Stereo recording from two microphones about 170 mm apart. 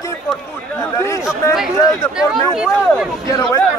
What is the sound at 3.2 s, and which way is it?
Speech, 20° left (ahead or behind).